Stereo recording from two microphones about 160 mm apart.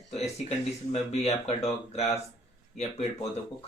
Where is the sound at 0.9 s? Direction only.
40° left (ahead or behind).